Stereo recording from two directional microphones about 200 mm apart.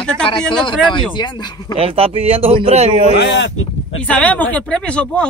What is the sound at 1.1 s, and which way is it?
Speech, 20° left (ahead or behind).